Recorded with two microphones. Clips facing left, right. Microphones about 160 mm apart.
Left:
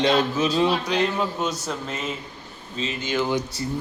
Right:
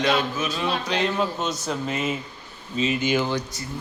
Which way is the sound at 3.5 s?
30° left (ahead or behind).